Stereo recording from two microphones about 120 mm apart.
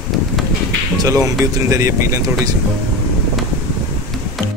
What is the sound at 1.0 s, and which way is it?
Speech, 25° right (ahead or behind).